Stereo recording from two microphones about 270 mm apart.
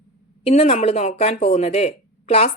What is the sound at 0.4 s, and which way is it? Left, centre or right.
Speech, left.